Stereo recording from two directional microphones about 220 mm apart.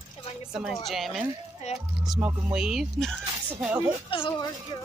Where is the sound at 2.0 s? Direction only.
5° right (ahead or behind).